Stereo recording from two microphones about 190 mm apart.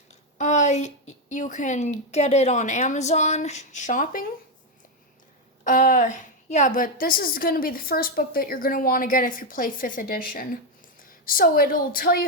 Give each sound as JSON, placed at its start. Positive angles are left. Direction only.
{"t": 0.1, "sound": "a woman's voice", "side_deg": 40}
{"t": 5.6, "sound": "a woman's voice", "side_deg": 45}